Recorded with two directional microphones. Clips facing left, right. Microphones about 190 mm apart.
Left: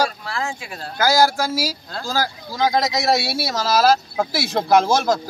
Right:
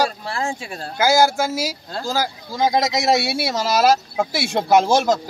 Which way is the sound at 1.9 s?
20° right (ahead or behind).